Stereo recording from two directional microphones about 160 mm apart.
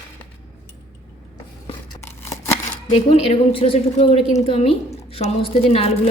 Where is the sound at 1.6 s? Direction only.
45° left (ahead or behind).